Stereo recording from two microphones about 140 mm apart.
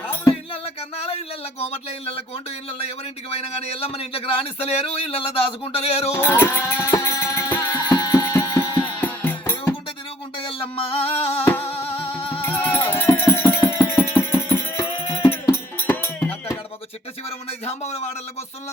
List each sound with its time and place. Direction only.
0.5 s a sound: 45° left (ahead or behind)
3.3 s a man's voice: 50° left (ahead or behind)
6.1 s music: 15° left (ahead or behind)
9.0 s music: 15° left (ahead or behind)
10.3 s music: 40° left (ahead or behind)
12.4 s music: 15° left (ahead or behind)
17.2 s a man's voice: 50° left (ahead or behind)